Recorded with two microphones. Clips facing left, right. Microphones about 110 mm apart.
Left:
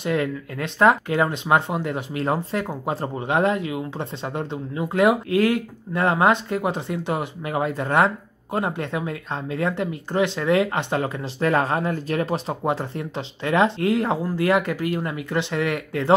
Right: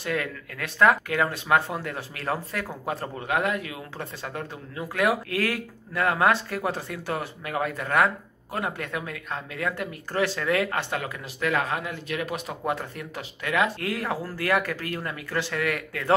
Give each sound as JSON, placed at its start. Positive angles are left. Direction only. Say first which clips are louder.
{"t": 0.0, "sound": "speech", "louder": "left 6 dB", "side_deg": 25}